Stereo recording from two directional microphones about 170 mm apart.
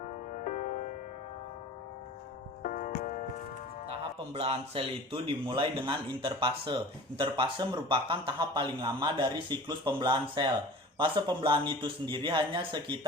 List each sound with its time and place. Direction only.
0.4 s music: 50° left (ahead or behind)
2.6 s music: 50° left (ahead or behind)
3.8 s speech: 35° right (ahead or behind)